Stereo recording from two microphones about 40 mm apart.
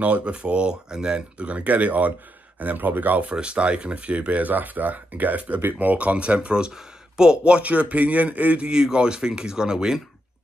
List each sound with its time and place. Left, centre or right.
0.0 s speech: right
1.4 s speech: right
3.2 s speech: right
8.6 s speech: centre